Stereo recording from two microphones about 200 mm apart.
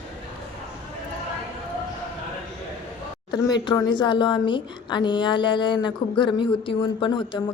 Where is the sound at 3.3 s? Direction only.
20° left (ahead or behind).